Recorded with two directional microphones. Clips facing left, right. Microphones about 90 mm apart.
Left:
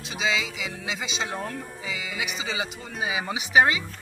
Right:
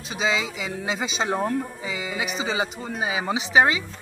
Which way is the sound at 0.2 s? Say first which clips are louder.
Right 2 dB; 35° right (ahead or behind).